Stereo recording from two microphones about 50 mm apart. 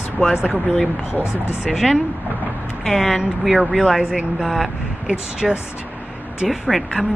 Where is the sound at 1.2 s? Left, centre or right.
Left.